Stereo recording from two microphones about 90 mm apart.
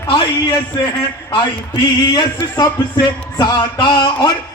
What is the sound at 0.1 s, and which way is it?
A man's voice, 60° left (ahead or behind).